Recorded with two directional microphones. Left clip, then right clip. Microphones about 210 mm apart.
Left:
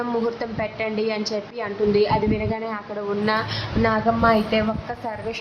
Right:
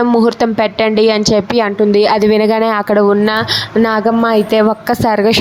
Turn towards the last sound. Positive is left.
turn(degrees=-50)  # may be behind; listen again after turning